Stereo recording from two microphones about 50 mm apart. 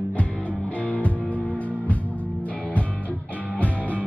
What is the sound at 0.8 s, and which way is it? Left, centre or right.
Music, left.